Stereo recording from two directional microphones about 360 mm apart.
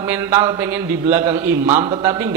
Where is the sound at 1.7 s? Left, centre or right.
Centre.